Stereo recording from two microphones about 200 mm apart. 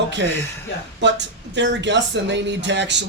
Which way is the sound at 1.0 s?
60° right (ahead or behind).